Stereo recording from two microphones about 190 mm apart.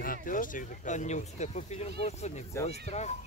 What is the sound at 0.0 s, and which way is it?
Speech, 45° left (ahead or behind).